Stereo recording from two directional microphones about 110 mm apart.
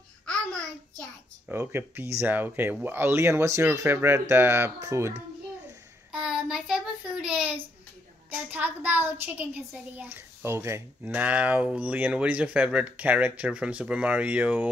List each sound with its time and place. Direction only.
0.3 s babbling: 10° left (ahead or behind)
1.5 s speech: 20° right (ahead or behind)
6.1 s speech: 5° right (ahead or behind); by 11.2 s 25° right (ahead or behind)
11.2 s speech: 15° right (ahead or behind)